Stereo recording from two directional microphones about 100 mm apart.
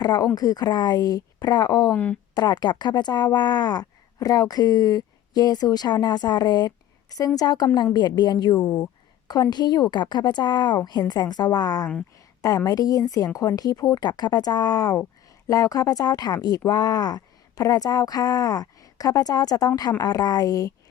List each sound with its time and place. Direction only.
0.0 s a woman's voice: 45° left (ahead or behind)
1.9 s speech: 15° left (ahead or behind)
2.3 s a woman's voice: 40° left (ahead or behind)